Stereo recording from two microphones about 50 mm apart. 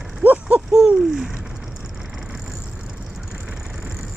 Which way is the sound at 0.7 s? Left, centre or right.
Centre.